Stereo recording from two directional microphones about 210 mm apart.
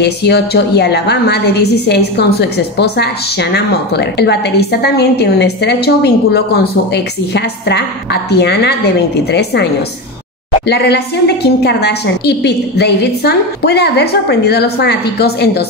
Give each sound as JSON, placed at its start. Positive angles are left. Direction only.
{"t": 0.0, "sound": "a woman's voice", "side_deg": 50}
{"t": 10.7, "sound": "a woman's voice", "side_deg": 50}